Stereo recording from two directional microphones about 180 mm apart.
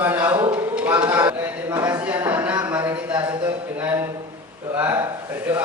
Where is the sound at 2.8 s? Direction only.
20° right (ahead or behind).